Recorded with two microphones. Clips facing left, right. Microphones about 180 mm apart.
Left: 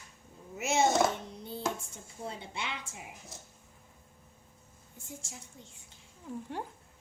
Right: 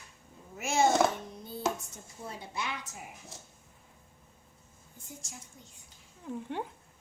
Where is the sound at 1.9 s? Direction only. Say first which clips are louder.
Left 2 dB; 25° left (ahead or behind).